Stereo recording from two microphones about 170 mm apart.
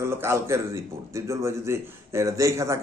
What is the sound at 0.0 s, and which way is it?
Speech, 15° right (ahead or behind).